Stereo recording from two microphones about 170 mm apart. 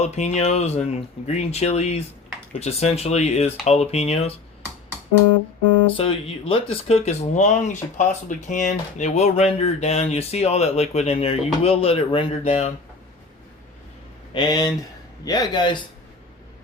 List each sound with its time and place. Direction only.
0.0 s speech: 40° left (ahead or behind)
6.0 s speech: 35° left (ahead or behind)
14.3 s a man's voice: 25° left (ahead or behind)